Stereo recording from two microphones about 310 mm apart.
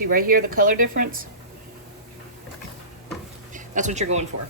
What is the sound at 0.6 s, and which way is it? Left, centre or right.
Speech, right.